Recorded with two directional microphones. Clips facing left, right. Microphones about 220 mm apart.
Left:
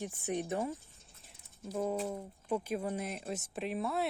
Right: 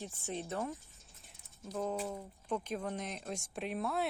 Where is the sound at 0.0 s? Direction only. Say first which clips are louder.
Left 5 dB; 15° left (ahead or behind).